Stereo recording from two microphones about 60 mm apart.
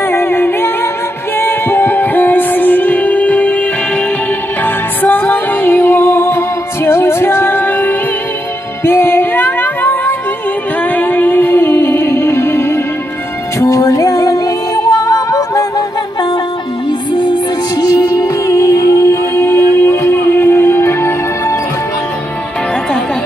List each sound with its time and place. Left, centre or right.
0.1 s music: left
4.6 s music: left
8.8 s music: left
13.6 s music: left
17.7 s music: left
19.4 s music: left